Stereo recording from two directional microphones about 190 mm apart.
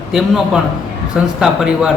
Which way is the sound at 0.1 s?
Centre (ahead or behind).